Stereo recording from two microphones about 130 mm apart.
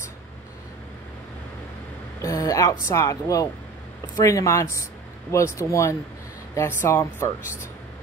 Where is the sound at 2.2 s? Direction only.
25° left (ahead or behind).